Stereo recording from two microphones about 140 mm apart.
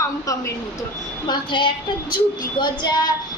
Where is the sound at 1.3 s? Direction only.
35° left (ahead or behind).